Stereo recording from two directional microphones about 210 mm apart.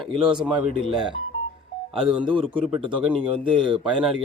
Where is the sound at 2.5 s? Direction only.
5° right (ahead or behind).